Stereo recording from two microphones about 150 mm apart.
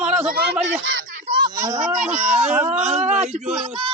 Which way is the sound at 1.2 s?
30° right (ahead or behind).